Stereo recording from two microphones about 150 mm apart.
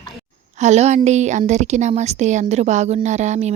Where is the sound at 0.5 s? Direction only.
50° right (ahead or behind).